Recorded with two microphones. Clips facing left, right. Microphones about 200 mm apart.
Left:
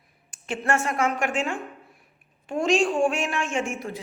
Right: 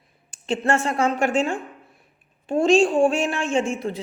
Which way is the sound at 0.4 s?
30° right (ahead or behind).